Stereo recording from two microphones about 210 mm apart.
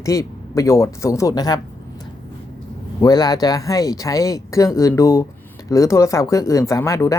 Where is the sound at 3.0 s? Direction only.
20° left (ahead or behind).